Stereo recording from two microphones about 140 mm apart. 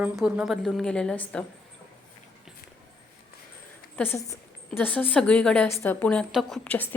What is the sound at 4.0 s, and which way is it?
A woman's voice, 20° left (ahead or behind).